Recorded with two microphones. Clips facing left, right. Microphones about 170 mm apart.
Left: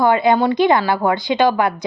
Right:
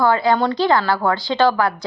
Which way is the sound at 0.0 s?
20° left (ahead or behind).